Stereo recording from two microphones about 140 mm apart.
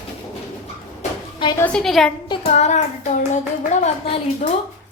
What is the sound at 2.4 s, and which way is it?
Hands, 55° left (ahead or behind).